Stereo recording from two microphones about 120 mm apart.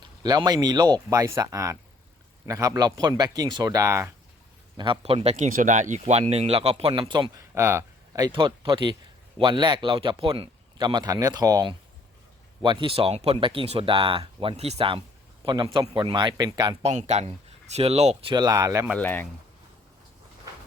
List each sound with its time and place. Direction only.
0.0 s speech: 35° right (ahead or behind)
4.8 s speech: 45° right (ahead or behind)
6.9 s speech: 40° right (ahead or behind)
7.5 s a sound: 20° right (ahead or behind)
8.3 s speech: 40° right (ahead or behind)
10.8 s speech: 35° right (ahead or behind)
12.6 s speech: 45° right (ahead or behind)
15.4 s speech: 40° right (ahead or behind)
16.8 s speech: 70° right (ahead or behind)
18.3 s speech: 30° right (ahead or behind)
18.9 s speech: 15° left (ahead or behind)